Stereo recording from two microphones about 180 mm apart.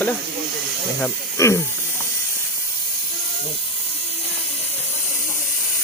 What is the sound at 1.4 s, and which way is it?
Speech, 15° left (ahead or behind).